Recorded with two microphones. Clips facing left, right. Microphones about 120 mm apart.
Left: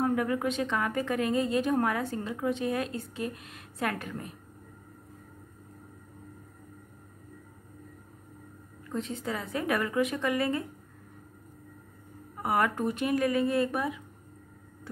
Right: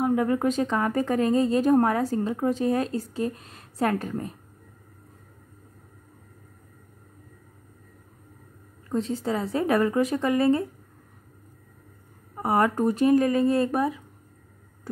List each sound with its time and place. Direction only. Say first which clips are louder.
0.0 s a sound: right 4 dB; 25° right (ahead or behind)
0.4 s a woman's voice: right 5 dB; 40° right (ahead or behind)
8.8 s a woman's voice: right 7 dB; 35° right (ahead or behind)
12.4 s a woman's voice: right 5 dB; 30° right (ahead or behind)